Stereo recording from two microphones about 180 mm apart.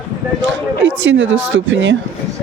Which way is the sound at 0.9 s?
90° right.